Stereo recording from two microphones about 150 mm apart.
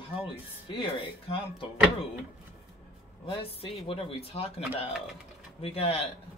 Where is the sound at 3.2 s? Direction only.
40° left (ahead or behind).